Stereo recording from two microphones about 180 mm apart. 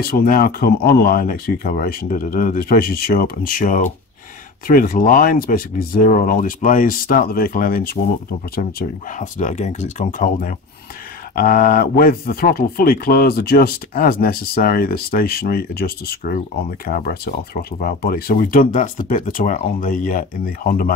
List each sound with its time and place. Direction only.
0.0 s speech: 55° left (ahead or behind)